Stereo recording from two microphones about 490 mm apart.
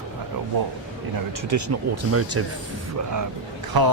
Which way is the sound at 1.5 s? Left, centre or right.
Right.